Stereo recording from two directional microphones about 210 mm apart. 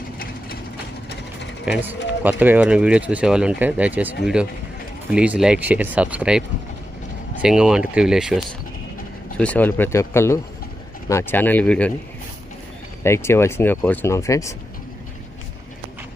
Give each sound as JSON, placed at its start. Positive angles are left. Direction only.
{"t": 1.6, "sound": "speech", "side_deg": -5}
{"t": 5.1, "sound": "speech", "side_deg": -5}
{"t": 7.4, "sound": "speech", "side_deg": -5}
{"t": 13.0, "sound": "speech", "side_deg": 10}